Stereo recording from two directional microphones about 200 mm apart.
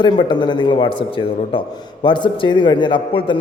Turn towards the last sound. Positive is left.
turn(degrees=25)  # may be behind; listen again after turning